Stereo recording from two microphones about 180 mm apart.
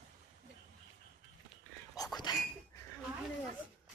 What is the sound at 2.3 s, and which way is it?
Speech, 25° left (ahead or behind).